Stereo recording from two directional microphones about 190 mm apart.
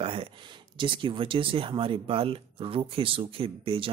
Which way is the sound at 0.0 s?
30° right (ahead or behind).